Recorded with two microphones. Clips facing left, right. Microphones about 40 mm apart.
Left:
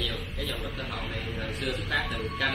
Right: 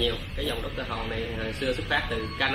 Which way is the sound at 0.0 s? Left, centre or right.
Right.